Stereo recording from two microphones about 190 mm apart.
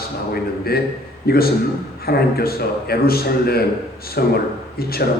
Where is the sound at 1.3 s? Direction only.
55° left (ahead or behind).